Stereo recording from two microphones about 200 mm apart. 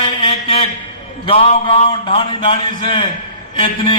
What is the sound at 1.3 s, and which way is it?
A man's voice, 25° left (ahead or behind).